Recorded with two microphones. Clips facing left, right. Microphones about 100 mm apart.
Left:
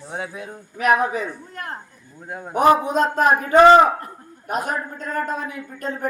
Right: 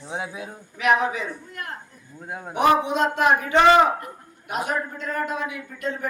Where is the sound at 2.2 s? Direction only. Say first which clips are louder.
Left 1 dB; 5° right (ahead or behind).